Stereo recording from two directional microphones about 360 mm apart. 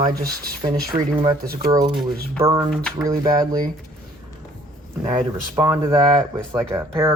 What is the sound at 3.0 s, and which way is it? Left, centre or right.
Speech, centre.